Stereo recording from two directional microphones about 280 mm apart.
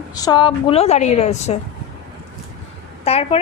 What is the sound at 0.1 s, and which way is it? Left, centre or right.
A woman's voice, centre.